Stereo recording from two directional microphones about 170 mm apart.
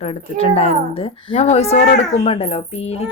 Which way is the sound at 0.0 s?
35° left (ahead or behind).